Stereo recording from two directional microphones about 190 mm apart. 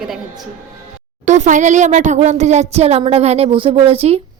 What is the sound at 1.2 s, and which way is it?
Speech, 40° right (ahead or behind).